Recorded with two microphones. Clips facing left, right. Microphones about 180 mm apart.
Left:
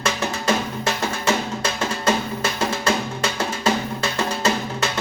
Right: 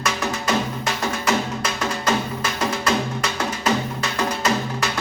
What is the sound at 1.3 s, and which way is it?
Music, 25° left (ahead or behind).